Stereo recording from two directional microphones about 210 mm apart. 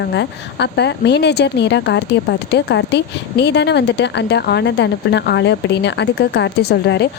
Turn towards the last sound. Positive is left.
turn(degrees=50)  # may be behind; listen again after turning